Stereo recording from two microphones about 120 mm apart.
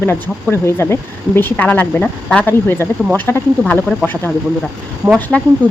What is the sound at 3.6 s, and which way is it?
Speech, centre (ahead or behind).